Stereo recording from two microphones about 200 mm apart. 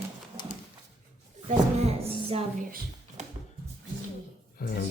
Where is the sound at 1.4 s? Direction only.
30° right (ahead or behind).